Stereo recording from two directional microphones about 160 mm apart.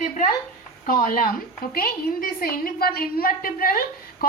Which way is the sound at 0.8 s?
60° left (ahead or behind).